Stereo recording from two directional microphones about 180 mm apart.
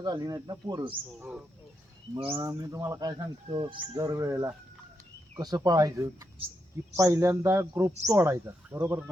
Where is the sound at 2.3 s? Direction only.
20° right (ahead or behind).